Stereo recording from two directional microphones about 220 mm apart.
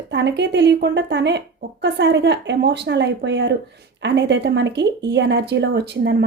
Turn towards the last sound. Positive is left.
turn(degrees=-50)  # may be behind; listen again after turning